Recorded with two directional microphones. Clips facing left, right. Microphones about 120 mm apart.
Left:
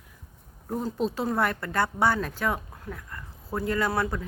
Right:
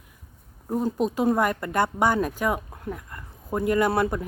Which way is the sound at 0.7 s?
10° right (ahead or behind).